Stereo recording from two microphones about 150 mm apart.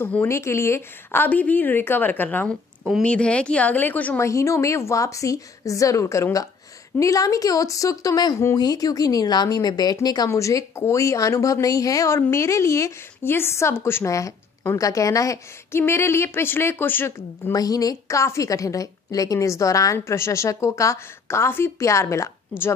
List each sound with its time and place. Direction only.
0.0 s speech: 15° left (ahead or behind)
2.8 s speech: centre (ahead or behind)
17.5 s speech: 25° left (ahead or behind)